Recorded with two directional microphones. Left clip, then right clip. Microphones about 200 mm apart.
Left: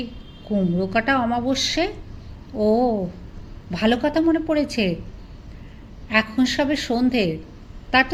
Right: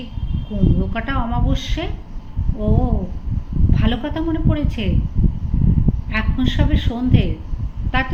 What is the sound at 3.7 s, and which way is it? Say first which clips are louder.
A woman's voice: left 4 dB; 40° left (ahead or behind).